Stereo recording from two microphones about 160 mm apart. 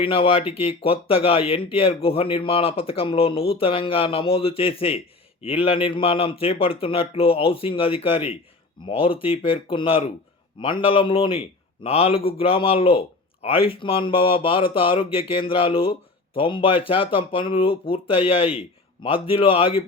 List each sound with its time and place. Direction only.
0.0 s a man's voice: 35° left (ahead or behind)